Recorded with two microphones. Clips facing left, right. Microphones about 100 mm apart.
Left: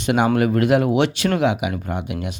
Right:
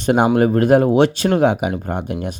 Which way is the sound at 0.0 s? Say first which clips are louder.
Right 3 dB; 40° right (ahead or behind).